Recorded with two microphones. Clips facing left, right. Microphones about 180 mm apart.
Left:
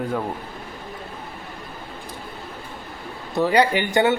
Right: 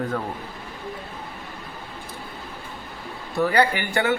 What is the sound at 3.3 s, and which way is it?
Speech, 20° left (ahead or behind).